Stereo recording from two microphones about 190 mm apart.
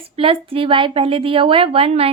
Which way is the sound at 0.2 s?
30° right (ahead or behind).